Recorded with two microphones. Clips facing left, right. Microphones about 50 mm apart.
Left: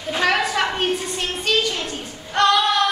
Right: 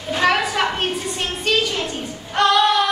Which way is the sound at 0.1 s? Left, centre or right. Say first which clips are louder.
Right 1 dB; centre.